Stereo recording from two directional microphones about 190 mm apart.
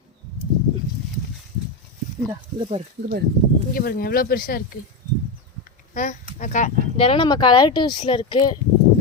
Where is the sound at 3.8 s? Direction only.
50° left (ahead or behind).